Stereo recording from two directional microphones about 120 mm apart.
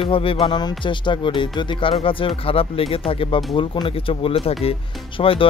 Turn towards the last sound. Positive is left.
turn(degrees=50)  # may be behind; listen again after turning